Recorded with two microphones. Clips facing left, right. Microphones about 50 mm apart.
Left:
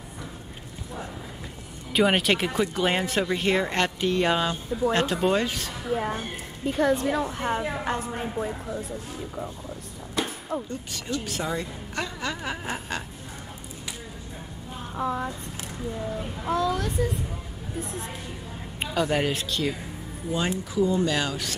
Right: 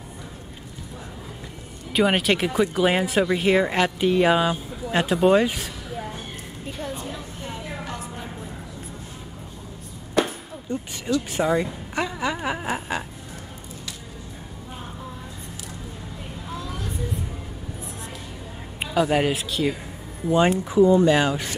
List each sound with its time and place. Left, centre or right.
1.9 s a woman's voice: centre
5.9 s a woman's voice: left
6.8 s a woman's voice: left
7.5 s a woman's voice: left
11.2 s a woman's voice: right
15.0 s a sound: left
16.4 s a sound: left
18.8 s a woman's voice: centre
20.2 s speech: right